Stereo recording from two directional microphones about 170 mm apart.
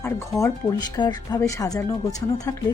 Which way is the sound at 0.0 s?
20° left (ahead or behind).